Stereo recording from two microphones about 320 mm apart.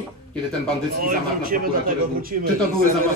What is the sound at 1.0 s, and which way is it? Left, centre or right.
Speech, right.